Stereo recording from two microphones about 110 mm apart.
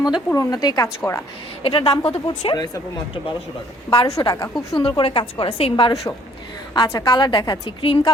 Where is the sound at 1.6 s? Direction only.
55° left (ahead or behind).